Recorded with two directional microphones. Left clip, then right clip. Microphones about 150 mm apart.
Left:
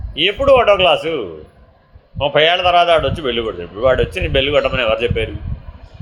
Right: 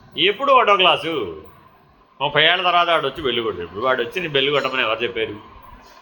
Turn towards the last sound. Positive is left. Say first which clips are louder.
# left 4 dB
turn(degrees=90)